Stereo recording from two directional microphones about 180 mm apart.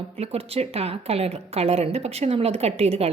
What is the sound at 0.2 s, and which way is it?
A woman's voice, 35° right (ahead or behind).